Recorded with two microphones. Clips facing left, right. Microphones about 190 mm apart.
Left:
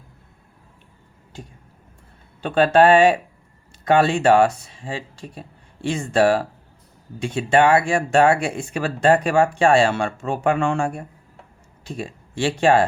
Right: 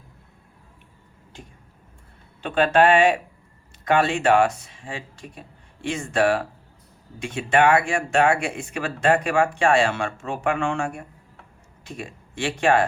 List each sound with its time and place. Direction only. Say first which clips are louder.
2.4 s speech: left 3 dB; 35° left (ahead or behind)